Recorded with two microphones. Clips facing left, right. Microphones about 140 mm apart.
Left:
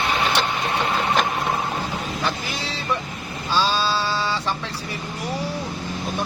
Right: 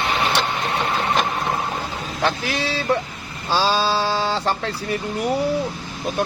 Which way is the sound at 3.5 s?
60° right (ahead or behind).